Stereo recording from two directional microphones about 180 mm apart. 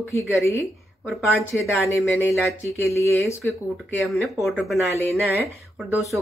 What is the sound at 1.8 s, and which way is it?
Speech, 15° left (ahead or behind).